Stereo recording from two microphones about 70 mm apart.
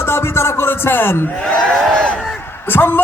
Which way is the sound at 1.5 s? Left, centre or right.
Centre.